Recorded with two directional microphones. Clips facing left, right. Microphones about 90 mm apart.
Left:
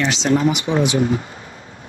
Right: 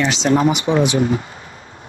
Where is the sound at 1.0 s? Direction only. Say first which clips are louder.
Right 1 dB; 10° right (ahead or behind).